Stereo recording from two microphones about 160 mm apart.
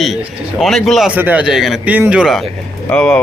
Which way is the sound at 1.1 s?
10° right (ahead or behind).